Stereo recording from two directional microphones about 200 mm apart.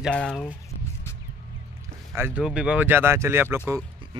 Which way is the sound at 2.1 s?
10° right (ahead or behind).